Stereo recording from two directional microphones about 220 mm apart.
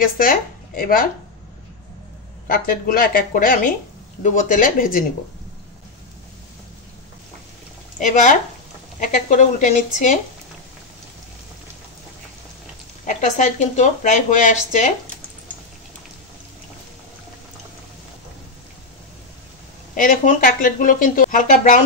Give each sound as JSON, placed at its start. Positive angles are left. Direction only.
{"t": 0.2, "sound": "speech", "side_deg": 40}
{"t": 2.4, "sound": "speech", "side_deg": 40}
{"t": 8.0, "sound": "speech", "side_deg": 35}
{"t": 13.0, "sound": "speech", "side_deg": 35}
{"t": 20.0, "sound": "speech", "side_deg": 40}